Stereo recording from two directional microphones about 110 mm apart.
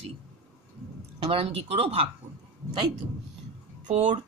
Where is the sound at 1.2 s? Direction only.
65° right (ahead or behind).